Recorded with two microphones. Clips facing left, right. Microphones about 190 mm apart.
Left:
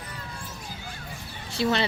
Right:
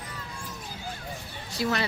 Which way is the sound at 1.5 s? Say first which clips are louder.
Left 3 dB; 25° left (ahead or behind).